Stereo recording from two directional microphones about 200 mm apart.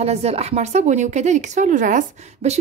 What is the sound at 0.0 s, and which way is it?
A woman's voice, 30° right (ahead or behind).